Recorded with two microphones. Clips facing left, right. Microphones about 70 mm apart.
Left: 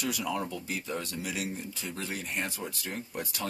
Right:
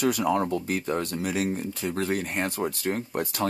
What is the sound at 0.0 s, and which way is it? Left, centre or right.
Speech, right.